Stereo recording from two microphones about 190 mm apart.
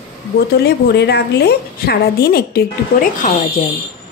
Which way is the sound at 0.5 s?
60° left (ahead or behind).